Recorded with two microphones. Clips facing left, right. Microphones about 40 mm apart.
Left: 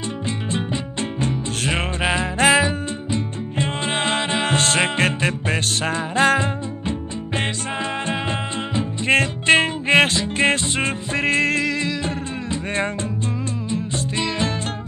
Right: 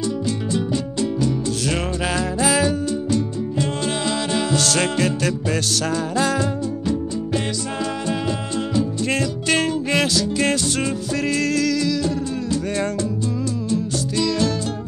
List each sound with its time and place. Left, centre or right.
1.7 s music: left
2.3 s music: left
2.6 s music: left
13.7 s music: left